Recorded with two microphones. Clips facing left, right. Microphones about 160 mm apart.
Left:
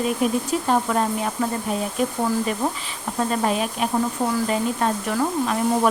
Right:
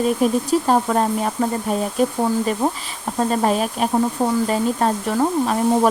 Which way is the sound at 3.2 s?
35° right (ahead or behind).